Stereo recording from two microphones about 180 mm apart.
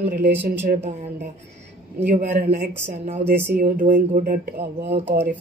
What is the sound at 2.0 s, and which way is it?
Speech, 45° right (ahead or behind).